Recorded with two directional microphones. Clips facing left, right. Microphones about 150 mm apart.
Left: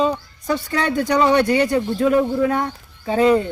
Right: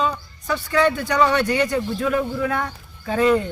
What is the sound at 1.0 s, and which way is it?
Speech, 15° left (ahead or behind).